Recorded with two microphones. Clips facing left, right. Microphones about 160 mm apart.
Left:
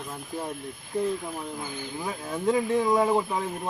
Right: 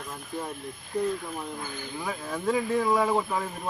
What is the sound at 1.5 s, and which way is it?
Speech, 15° left (ahead or behind).